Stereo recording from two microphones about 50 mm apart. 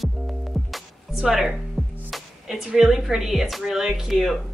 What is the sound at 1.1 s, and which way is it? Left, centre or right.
Speech, centre.